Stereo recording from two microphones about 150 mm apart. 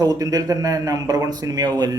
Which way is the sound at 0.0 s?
25° right (ahead or behind).